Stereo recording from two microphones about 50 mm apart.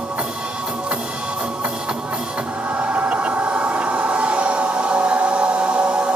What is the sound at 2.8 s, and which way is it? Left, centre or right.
Music, right.